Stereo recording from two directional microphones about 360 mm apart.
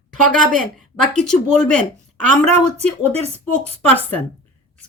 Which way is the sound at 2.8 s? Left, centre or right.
Centre.